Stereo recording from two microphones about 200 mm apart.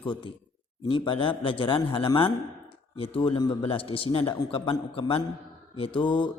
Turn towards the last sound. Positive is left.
turn(degrees=25)  # may be behind; listen again after turning